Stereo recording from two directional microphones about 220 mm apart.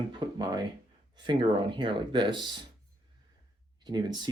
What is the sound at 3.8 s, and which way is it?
Speech, 20° right (ahead or behind).